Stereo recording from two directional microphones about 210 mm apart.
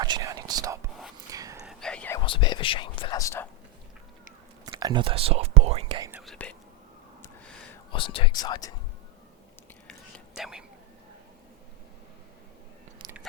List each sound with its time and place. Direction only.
0.0 s whispering: 15° right (ahead or behind)
1.6 s whispering: 5° left (ahead or behind)
2.2 s whispering: 25° left (ahead or behind)
4.6 s speech: 20° right (ahead or behind)
6.0 s whispering: 10° right (ahead or behind)
6.2 s whispering: 5° left (ahead or behind)
7.9 s speech: 25° left (ahead or behind)
10.3 s whispering: centre (ahead or behind)
13.0 s biting: 15° right (ahead or behind)